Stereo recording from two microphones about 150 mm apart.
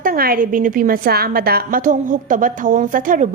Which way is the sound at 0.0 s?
75° right (ahead or behind).